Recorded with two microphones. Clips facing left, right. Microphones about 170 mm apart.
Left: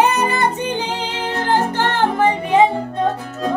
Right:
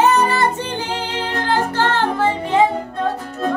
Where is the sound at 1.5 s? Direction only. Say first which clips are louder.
Left 1 dB; 15° left (ahead or behind).